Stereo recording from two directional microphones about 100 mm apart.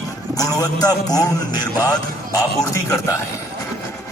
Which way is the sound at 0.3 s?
35° left (ahead or behind).